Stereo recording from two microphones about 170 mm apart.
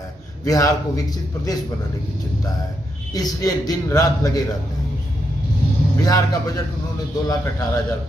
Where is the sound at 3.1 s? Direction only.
20° left (ahead or behind).